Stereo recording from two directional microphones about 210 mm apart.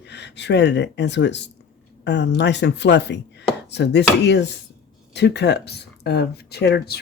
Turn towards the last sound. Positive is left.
turn(degrees=50)  # may be behind; listen again after turning